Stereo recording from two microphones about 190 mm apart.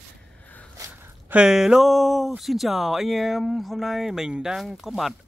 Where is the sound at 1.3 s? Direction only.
5° right (ahead or behind).